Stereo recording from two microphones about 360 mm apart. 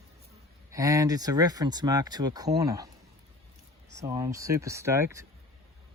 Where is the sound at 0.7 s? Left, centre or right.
Centre.